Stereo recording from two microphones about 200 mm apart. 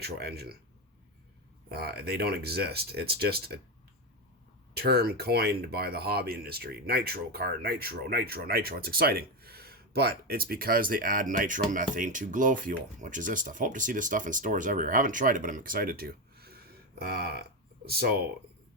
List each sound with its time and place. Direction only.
0.0 s speech: 55° right (ahead or behind)
1.7 s speech: 50° right (ahead or behind)
4.7 s speech: 50° right (ahead or behind)